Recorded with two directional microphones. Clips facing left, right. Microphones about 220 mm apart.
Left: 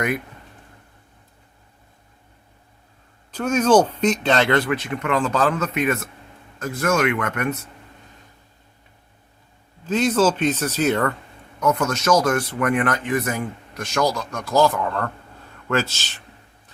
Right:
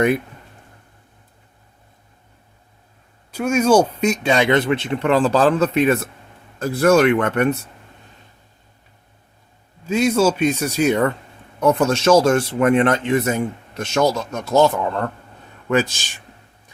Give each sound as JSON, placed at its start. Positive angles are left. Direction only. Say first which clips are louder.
{"t": 3.3, "sound": "speech", "louder": "right 1 dB", "side_deg": -10}
{"t": 9.8, "sound": "speech", "louder": "right 2 dB", "side_deg": -10}
{"t": 11.6, "sound": "speech", "louder": "right 5 dB", "side_deg": -30}